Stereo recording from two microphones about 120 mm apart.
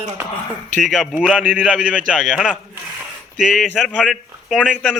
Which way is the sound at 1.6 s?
10° left (ahead or behind).